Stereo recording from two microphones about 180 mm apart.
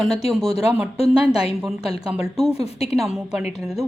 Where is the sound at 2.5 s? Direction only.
35° left (ahead or behind).